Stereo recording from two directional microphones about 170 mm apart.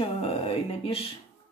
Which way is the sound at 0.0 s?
35° left (ahead or behind).